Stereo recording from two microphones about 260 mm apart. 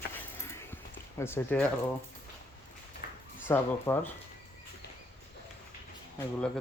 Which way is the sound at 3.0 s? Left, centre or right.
Left.